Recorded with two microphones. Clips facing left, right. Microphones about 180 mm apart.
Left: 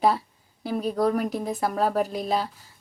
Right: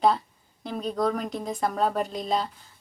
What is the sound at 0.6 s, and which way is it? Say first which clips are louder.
Speech: left 3 dB; 5° left (ahead or behind).